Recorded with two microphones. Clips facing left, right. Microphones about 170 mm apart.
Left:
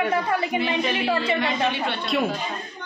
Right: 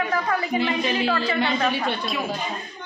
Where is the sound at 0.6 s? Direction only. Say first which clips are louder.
Right 1 dB; 25° left (ahead or behind).